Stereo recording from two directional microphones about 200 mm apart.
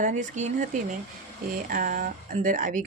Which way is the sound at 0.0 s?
40° right (ahead or behind).